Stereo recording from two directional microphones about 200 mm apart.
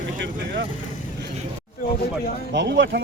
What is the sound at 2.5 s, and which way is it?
Speech, 60° right (ahead or behind).